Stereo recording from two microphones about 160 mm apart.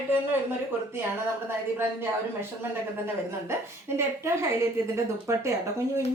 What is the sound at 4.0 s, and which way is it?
A woman's voice, 15° right (ahead or behind).